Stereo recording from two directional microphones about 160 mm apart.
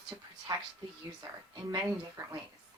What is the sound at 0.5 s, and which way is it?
Speech, 25° right (ahead or behind).